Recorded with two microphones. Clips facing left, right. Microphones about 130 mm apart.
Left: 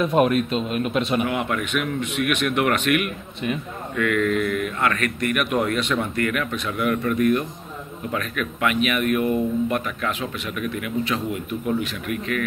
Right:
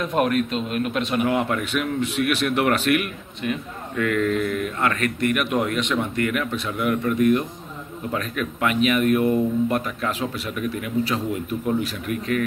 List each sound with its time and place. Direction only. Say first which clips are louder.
0.0 s a man's voice: left 2 dB; 5° left (ahead or behind)
1.2 s speech: right 2 dB; 35° right (ahead or behind)
3.4 s a man's voice: even; 5° left (ahead or behind)
3.9 s speech: even; 35° right (ahead or behind)